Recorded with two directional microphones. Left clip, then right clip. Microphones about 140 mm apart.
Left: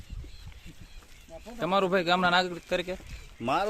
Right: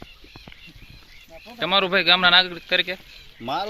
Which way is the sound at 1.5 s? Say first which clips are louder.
Right 6 dB; 5° left (ahead or behind).